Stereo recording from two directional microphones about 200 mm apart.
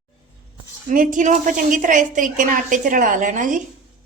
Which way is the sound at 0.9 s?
40° right (ahead or behind).